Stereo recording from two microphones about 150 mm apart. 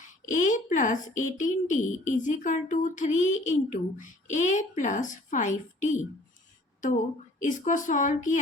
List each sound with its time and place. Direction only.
0.0 s speech: 55° left (ahead or behind)
7.3 s speech: 60° left (ahead or behind)